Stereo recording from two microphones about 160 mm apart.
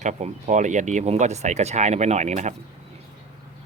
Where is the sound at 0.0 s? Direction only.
45° right (ahead or behind).